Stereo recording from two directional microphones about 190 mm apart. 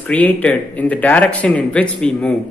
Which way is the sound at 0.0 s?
5° left (ahead or behind).